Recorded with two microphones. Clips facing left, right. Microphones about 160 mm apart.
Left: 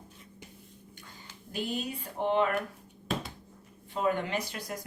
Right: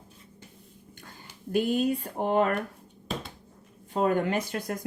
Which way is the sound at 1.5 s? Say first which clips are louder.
Right 9 dB; 50° right (ahead or behind).